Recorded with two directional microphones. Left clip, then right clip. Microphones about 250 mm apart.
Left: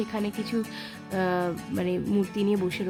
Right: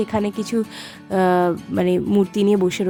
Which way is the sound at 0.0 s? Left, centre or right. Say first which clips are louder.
Right 9 dB; right.